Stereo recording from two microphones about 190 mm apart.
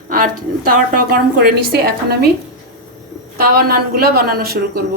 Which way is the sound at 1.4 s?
55° right (ahead or behind).